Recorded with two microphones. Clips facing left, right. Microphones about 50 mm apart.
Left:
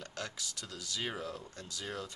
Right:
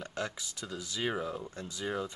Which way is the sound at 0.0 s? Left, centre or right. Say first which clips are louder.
Right 5 dB; centre.